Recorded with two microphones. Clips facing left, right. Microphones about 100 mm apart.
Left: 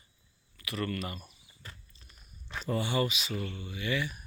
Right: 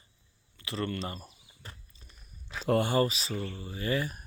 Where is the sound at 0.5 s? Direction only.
25° right (ahead or behind).